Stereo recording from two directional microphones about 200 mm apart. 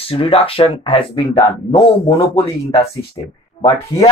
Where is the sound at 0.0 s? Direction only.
30° left (ahead or behind).